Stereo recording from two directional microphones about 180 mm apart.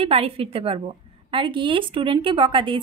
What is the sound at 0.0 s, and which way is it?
A woman's voice, 30° right (ahead or behind).